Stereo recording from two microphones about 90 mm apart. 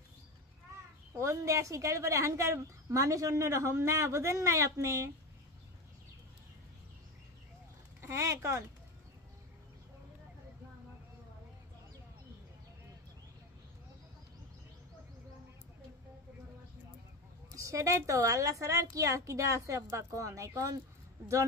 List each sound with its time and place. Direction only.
1.1 s speech: 35° right (ahead or behind)
8.0 s speech: 35° right (ahead or behind)
17.5 s speech: 35° right (ahead or behind)